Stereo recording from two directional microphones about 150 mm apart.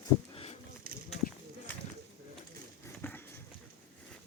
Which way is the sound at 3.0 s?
10° left (ahead or behind).